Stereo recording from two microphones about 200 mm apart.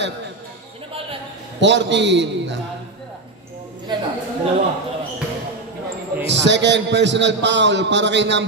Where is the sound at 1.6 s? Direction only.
60° right (ahead or behind).